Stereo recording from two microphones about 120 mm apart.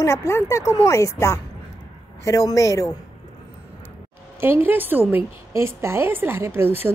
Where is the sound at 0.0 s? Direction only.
25° left (ahead or behind).